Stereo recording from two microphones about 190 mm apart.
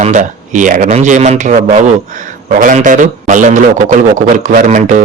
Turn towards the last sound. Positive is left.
turn(degrees=-40)  # may be behind; listen again after turning